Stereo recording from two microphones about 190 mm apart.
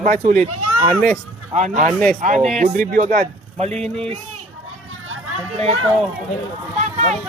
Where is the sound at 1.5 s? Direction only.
40° right (ahead or behind).